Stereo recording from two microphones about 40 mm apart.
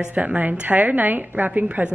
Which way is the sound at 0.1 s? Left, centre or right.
Right.